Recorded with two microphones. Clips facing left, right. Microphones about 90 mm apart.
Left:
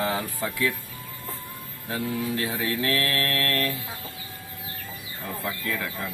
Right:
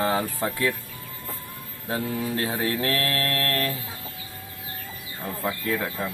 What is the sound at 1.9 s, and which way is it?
Mantra, 35° right (ahead or behind).